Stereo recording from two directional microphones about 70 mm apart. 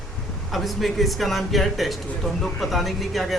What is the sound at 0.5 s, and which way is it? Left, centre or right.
Speech, centre.